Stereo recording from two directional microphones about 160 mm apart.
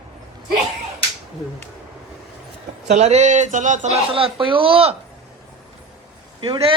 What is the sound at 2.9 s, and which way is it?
Speech, 45° right (ahead or behind).